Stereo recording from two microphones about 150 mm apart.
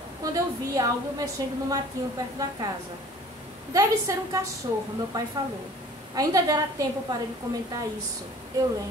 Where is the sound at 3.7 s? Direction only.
25° right (ahead or behind).